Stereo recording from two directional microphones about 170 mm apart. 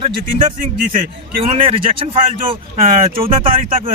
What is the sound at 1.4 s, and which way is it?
Speech, 35° right (ahead or behind).